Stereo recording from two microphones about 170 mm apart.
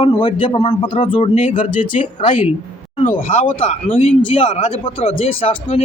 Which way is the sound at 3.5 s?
30° left (ahead or behind).